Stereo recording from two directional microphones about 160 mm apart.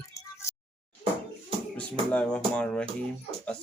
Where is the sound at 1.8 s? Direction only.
5° left (ahead or behind).